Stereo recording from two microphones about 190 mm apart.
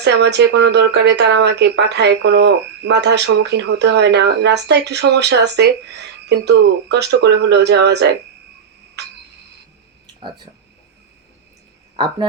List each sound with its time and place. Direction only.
0.0 s speech: 65° right (ahead or behind)
9.0 s a sound: 60° right (ahead or behind)
11.9 s speech: 25° right (ahead or behind)